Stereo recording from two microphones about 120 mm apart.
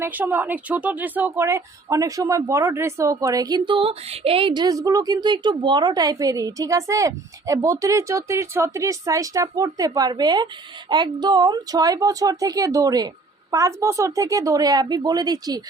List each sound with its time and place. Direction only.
0.0 s speech: 15° right (ahead or behind); by 15.6 s 35° right (ahead or behind)